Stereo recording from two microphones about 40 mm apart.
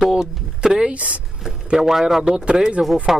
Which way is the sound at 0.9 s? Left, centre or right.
Right.